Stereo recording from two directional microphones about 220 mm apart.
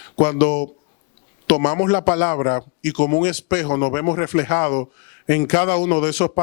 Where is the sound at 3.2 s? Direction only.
15° left (ahead or behind).